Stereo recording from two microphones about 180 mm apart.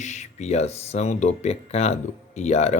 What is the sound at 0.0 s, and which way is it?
Speech, 40° left (ahead or behind).